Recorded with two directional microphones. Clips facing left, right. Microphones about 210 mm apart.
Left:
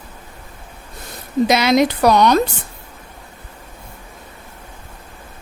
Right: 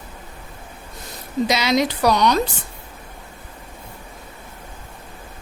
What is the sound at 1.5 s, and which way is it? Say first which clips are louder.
Speech: left 5 dB; 55° left (ahead or behind).